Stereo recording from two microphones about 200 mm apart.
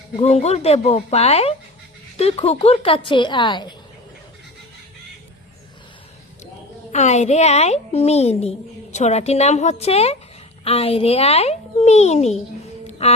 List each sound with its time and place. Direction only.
0.2 s a child's voice: 30° left (ahead or behind)
6.9 s a child's voice: 35° left (ahead or behind)
12.9 s a sound: 30° left (ahead or behind)